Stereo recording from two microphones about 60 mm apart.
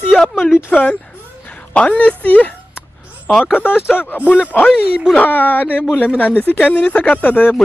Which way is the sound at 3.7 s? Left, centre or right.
Centre.